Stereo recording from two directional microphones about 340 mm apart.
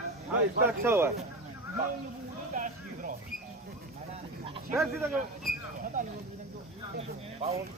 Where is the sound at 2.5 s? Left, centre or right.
Right.